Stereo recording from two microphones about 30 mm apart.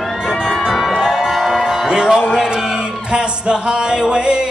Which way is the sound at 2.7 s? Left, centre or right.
Right.